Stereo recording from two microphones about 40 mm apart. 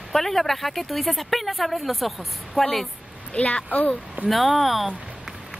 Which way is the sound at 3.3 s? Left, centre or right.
Left.